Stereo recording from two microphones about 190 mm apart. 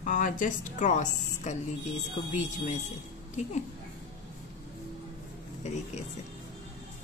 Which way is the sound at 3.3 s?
35° left (ahead or behind).